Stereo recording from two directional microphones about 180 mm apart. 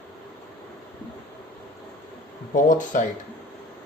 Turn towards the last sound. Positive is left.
turn(degrees=45)  # may be behind; listen again after turning